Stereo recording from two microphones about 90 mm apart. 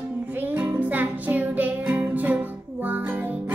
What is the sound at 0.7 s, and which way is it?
Music, 15° right (ahead or behind).